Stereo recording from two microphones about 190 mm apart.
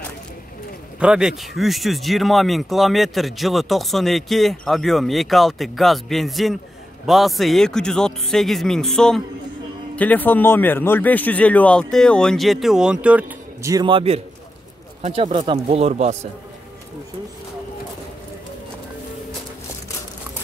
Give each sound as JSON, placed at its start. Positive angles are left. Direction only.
{"t": 0.9, "sound": "speech", "side_deg": -5}